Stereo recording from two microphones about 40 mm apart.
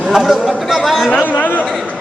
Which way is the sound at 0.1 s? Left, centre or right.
Centre.